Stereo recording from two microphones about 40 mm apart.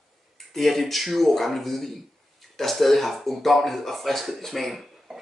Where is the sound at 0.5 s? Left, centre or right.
Centre.